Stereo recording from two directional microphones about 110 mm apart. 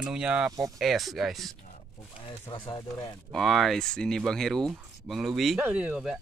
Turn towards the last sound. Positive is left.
turn(degrees=-5)  # may be behind; listen again after turning